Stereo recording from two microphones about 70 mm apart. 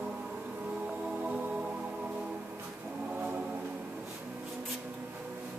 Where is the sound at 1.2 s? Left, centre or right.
Right.